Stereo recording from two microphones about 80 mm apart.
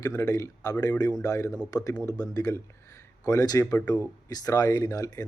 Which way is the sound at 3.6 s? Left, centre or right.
Left.